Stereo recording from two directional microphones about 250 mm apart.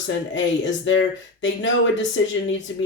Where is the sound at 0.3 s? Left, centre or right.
Left.